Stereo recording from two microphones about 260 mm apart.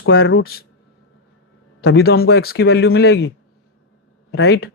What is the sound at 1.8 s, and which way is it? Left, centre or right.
Speech, left.